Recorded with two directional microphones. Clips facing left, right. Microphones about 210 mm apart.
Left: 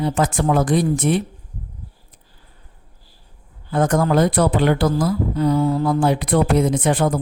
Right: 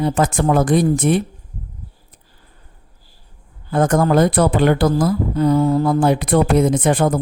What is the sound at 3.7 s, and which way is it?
Speech, 50° right (ahead or behind).